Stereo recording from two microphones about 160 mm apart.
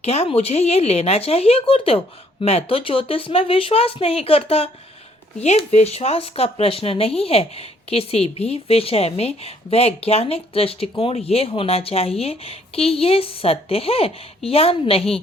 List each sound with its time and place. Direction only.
0.0 s speech: 40° left (ahead or behind)